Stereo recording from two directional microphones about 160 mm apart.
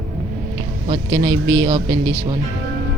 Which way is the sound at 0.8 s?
30° right (ahead or behind).